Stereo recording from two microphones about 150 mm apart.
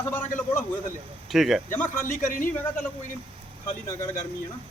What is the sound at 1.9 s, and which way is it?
Speech, 65° left (ahead or behind).